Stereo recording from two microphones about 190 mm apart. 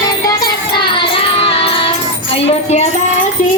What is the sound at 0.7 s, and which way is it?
Music, 25° left (ahead or behind).